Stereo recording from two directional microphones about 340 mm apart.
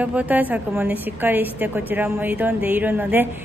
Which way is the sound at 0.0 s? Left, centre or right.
Centre.